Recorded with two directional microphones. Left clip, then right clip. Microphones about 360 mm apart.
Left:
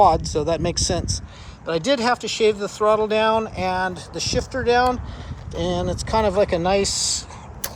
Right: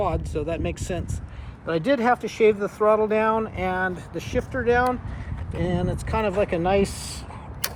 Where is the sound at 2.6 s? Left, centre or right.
Centre.